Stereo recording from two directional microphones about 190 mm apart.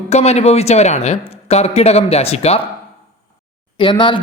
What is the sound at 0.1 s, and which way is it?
A man's voice, 35° left (ahead or behind).